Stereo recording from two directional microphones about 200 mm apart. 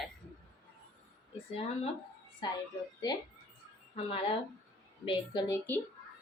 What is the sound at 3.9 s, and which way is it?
Speech, 30° left (ahead or behind).